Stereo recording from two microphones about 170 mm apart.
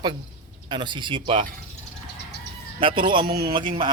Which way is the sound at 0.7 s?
25° right (ahead or behind).